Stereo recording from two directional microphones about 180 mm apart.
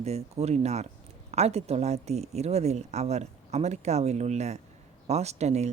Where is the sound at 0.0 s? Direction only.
35° right (ahead or behind).